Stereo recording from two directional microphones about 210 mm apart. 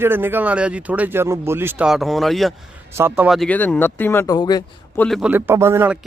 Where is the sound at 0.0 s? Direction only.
10° right (ahead or behind).